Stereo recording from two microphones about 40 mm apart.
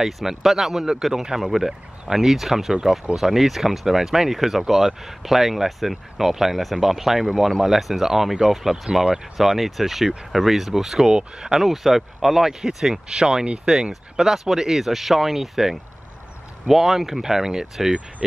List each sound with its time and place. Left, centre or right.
0.0 s speech: centre
9.6 s speech: centre